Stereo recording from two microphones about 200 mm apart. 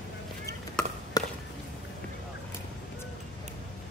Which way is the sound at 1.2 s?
20° left (ahead or behind).